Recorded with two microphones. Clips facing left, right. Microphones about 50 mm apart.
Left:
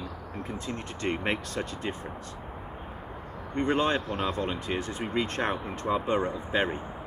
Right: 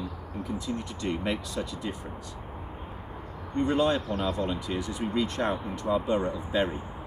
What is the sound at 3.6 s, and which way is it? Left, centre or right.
Speech, left.